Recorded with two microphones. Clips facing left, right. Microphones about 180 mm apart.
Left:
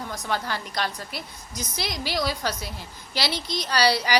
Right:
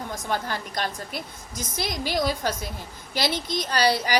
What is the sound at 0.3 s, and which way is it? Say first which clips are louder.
A woman's voice: even; 45° right (ahead or behind).